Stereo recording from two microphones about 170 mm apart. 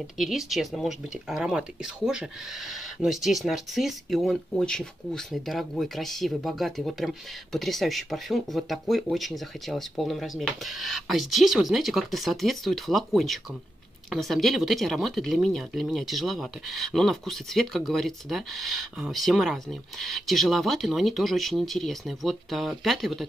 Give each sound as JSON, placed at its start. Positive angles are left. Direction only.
{"t": 0.2, "sound": "speech", "side_deg": 0}